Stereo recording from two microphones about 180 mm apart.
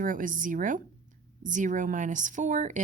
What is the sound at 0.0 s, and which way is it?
Speech, 50° right (ahead or behind).